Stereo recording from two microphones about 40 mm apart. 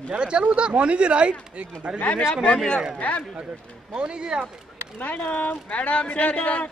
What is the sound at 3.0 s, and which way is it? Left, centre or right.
Speech, left.